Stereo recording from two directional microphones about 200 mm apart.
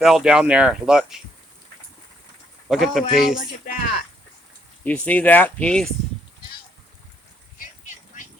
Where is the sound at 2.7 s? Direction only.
Centre (ahead or behind).